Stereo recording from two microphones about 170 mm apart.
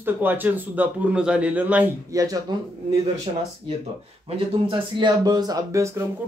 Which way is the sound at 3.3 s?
30° right (ahead or behind).